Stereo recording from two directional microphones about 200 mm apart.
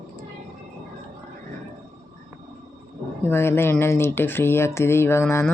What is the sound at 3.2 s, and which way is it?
Speech, 10° left (ahead or behind).